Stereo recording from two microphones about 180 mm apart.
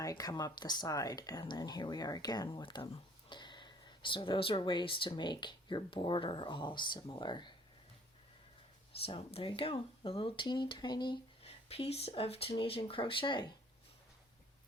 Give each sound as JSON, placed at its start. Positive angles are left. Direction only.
{"t": 0.0, "sound": "speech", "side_deg": 20}
{"t": 9.0, "sound": "speech", "side_deg": 30}